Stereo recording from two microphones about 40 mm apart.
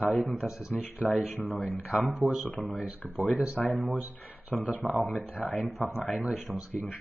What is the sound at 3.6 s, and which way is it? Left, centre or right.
Speech, left.